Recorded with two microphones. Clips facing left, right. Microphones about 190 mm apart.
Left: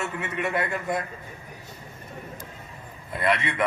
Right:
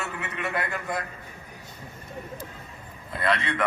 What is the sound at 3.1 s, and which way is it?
Speech, 25° left (ahead or behind).